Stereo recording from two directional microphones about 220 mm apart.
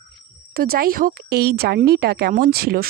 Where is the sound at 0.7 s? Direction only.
40° right (ahead or behind).